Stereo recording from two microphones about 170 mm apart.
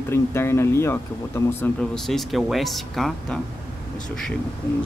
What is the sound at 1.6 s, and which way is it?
Speech, 5° left (ahead or behind).